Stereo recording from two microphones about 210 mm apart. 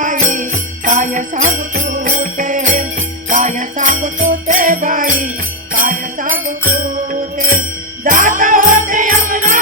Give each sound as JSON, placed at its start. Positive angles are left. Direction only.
{"t": 0.0, "sound": "jingle bell", "side_deg": -40}
{"t": 4.3, "sound": "music", "side_deg": -40}
{"t": 5.7, "sound": "jingle bell", "side_deg": -40}
{"t": 7.1, "sound": "music", "side_deg": -40}
{"t": 8.0, "sound": "jingle bell", "side_deg": -40}